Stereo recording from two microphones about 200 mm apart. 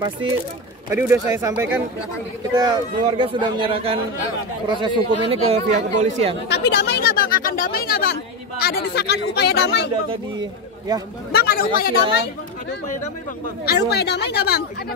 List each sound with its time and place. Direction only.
0.8 s speech: 10° right (ahead or behind)
2.5 s speech: 20° right (ahead or behind); by 6.3 s 40° right (ahead or behind)
6.5 s speech: 55° left (ahead or behind)
10.9 s speech: 20° right (ahead or behind)
11.3 s speech: 45° left (ahead or behind)
13.7 s speech: 55° left (ahead or behind)